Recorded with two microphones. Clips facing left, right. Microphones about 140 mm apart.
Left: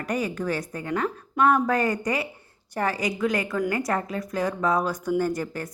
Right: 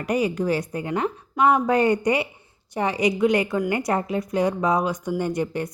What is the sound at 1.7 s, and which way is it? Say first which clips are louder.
A woman's voice: right 5 dB; 25° right (ahead or behind).